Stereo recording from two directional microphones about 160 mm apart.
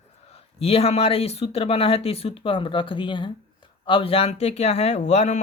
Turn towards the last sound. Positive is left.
turn(degrees=45)  # may be behind; listen again after turning